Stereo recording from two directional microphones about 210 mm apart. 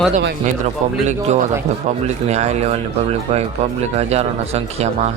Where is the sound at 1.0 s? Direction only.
35° right (ahead or behind).